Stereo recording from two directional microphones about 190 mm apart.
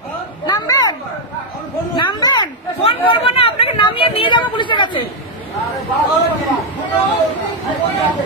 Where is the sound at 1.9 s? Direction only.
25° left (ahead or behind).